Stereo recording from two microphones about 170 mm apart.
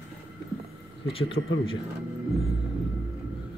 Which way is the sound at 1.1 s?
30° left (ahead or behind).